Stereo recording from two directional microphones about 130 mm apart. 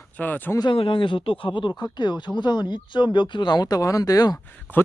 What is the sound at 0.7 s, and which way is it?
Speech, 40° left (ahead or behind).